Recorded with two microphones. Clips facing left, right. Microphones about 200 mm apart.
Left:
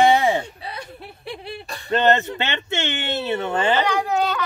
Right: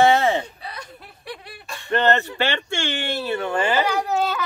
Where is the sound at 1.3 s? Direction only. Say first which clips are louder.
Left 3 dB; 25° left (ahead or behind).